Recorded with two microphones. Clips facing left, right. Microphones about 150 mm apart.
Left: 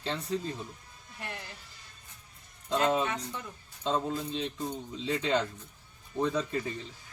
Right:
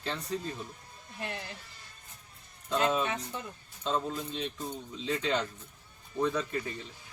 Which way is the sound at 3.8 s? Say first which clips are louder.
Left 2 dB; 20° left (ahead or behind).